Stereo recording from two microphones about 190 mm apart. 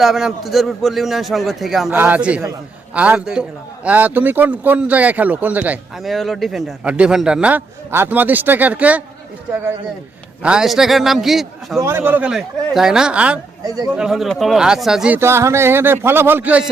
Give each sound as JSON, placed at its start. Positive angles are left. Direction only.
{"t": 0.0, "sound": "a man's voice", "side_deg": 0}
{"t": 10.4, "sound": "a man's voice", "side_deg": -5}
{"t": 11.8, "sound": "a man's voice", "side_deg": -10}
{"t": 13.7, "sound": "a man's voice", "side_deg": -20}
{"t": 13.9, "sound": "speech", "side_deg": -5}